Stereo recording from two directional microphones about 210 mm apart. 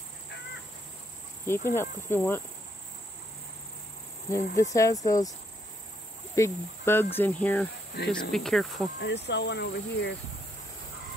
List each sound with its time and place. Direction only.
1.4 s cricket: 10° left (ahead or behind)
4.3 s cricket: 15° left (ahead or behind)
6.3 s cricket: 10° left (ahead or behind)
8.0 s speech: 50° left (ahead or behind)
8.3 s speech: centre (ahead or behind)
9.0 s speech: 55° left (ahead or behind)